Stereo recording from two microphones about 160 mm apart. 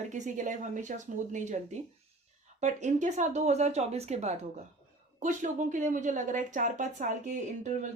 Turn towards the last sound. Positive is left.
turn(degrees=-50)  # may be behind; listen again after turning